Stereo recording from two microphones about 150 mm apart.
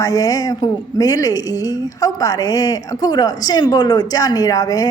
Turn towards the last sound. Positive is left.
turn(degrees=25)  # may be behind; listen again after turning